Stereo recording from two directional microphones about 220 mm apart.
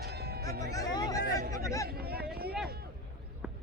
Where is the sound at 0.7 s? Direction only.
15° left (ahead or behind).